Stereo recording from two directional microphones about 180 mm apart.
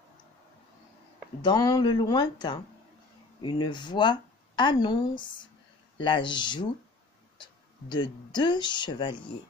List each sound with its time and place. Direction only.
1.4 s speech: 20° left (ahead or behind)
7.9 s speech: 25° left (ahead or behind)